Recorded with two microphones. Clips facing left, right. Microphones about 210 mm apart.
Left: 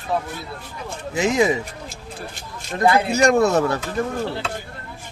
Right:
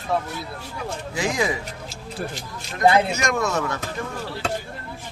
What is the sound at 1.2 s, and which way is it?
Speech, 20° left (ahead or behind).